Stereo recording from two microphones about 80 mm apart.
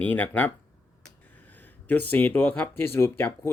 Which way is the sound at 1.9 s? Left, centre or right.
Left.